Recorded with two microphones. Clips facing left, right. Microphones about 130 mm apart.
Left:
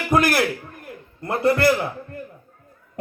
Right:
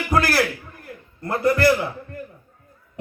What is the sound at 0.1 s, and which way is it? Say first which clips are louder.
A man's voice: left 2 dB; 20° left (ahead or behind).